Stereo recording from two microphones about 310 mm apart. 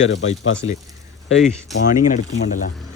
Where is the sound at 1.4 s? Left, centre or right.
Centre.